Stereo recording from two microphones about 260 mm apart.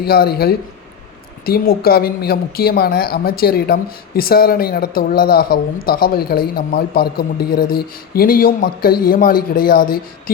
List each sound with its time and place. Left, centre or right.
0.0 s a woman's voice: left